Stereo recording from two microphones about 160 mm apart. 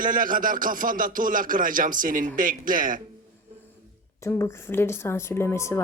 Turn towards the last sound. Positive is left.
turn(degrees=15)  # may be behind; listen again after turning